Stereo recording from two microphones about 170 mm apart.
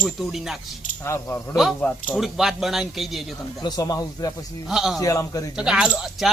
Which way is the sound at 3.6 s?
20° left (ahead or behind).